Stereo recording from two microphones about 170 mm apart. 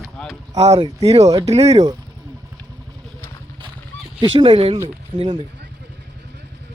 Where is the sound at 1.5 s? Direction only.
40° right (ahead or behind).